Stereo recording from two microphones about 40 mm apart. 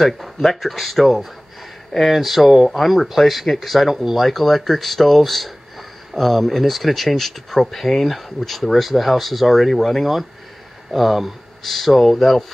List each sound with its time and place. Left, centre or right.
0.0 s speech: centre